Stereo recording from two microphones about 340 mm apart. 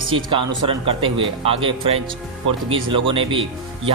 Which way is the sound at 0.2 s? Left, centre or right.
Centre.